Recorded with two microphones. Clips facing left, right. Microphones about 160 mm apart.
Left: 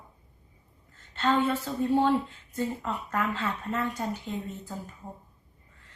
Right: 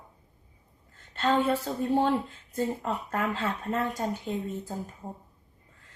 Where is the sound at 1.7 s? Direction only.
45° right (ahead or behind).